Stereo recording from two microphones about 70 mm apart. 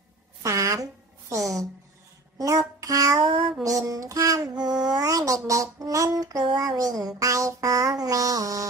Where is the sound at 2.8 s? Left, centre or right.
Right.